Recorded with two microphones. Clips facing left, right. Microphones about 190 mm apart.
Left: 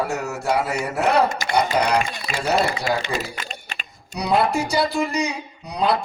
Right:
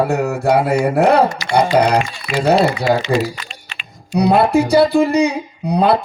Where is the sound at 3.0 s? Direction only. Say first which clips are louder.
Right 9 dB; 50° left (ahead or behind).